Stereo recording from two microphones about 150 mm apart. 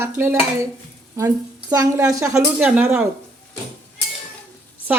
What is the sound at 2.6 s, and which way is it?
Speech, 10° right (ahead or behind).